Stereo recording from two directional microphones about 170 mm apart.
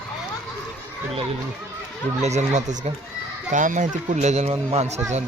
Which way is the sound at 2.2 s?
40° right (ahead or behind).